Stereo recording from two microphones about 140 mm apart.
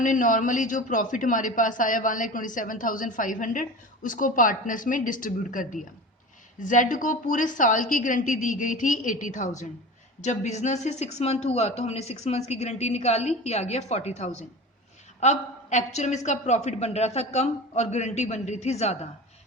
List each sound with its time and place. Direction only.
0.0 s a man's voice: 65° left (ahead or behind); by 18.9 s 50° left (ahead or behind)